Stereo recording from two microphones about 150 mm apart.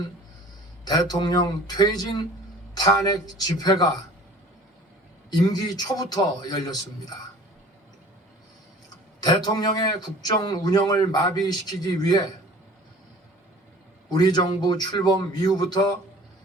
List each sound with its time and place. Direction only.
0.9 s a man's voice: 25° left (ahead or behind)
5.3 s a man's voice: 25° left (ahead or behind)
9.2 s a man's voice: 25° left (ahead or behind)
14.1 s a man's voice: 30° left (ahead or behind)